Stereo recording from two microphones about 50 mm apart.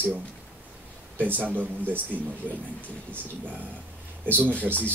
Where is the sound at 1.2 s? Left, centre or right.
Right.